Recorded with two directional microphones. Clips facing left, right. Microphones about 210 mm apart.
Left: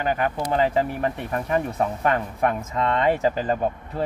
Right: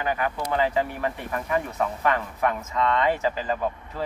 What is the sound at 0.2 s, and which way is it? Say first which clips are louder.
Speech: left 3 dB; 30° left (ahead or behind).